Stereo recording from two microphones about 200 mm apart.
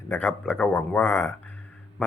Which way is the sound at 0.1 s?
5° left (ahead or behind).